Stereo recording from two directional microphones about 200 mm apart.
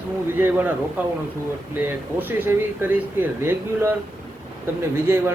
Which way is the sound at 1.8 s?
10° right (ahead or behind).